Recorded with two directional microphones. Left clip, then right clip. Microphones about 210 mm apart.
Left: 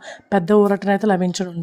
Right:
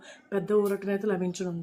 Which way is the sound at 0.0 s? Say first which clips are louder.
Left 11 dB; 45° left (ahead or behind).